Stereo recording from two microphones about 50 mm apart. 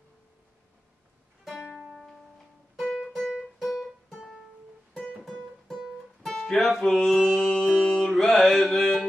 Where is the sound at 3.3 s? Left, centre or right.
Centre.